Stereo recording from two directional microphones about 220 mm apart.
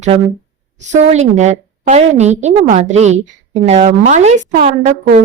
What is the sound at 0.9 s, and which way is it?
A woman's voice, 30° right (ahead or behind).